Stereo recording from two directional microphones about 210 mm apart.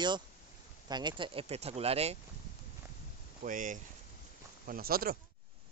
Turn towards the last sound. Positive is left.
turn(degrees=-45)  # may be behind; listen again after turning